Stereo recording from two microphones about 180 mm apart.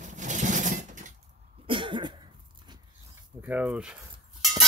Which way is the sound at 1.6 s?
25° right (ahead or behind).